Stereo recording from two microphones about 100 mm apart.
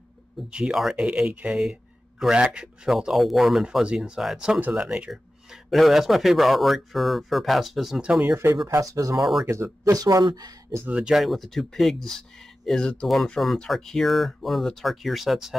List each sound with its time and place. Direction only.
0.5 s speech: 10° right (ahead or behind)
8.6 s speech: 35° right (ahead or behind)
9.2 s speech: 5° right (ahead or behind)
9.5 s speech: 30° right (ahead or behind)
10.9 s speech: 10° right (ahead or behind)